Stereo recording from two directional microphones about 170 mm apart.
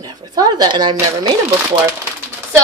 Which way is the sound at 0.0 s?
25° right (ahead or behind).